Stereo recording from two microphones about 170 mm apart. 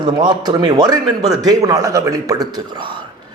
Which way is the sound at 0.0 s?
25° right (ahead or behind).